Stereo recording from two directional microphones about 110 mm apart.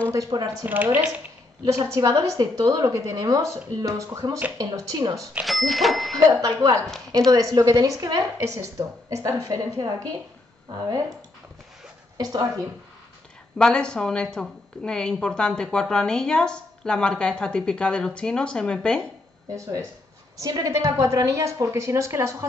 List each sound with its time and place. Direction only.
0.1 s a woman's voice: 35° right (ahead or behind)
0.7 s a woman's voice: 15° right (ahead or behind)
1.6 s a woman's voice: 30° right (ahead or behind)
5.4 s speech: centre (ahead or behind)
6.1 s a woman's voice: 35° right (ahead or behind)
12.2 s a woman's voice: 35° right (ahead or behind)
13.6 s a woman's voice: 5° left (ahead or behind)
19.5 s a woman's voice: 30° right (ahead or behind)